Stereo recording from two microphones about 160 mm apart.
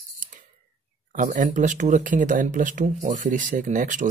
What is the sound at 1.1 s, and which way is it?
Speech, 55° right (ahead or behind).